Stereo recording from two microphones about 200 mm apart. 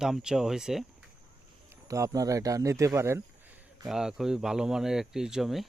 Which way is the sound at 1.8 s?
15° right (ahead or behind).